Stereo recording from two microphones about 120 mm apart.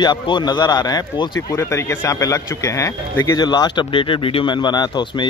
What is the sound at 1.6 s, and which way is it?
Speech, 25° left (ahead or behind).